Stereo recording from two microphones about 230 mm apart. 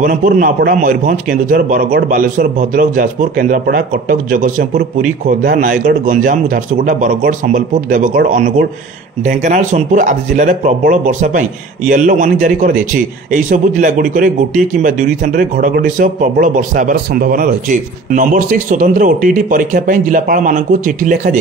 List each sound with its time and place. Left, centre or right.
0.0 s a man's voice: right